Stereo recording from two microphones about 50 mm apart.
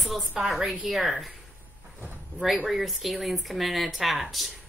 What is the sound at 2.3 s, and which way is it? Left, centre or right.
Speech, left.